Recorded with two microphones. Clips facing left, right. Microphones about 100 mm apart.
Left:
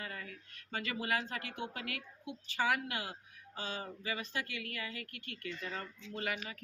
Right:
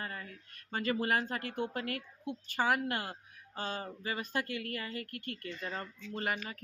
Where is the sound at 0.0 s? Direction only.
40° right (ahead or behind).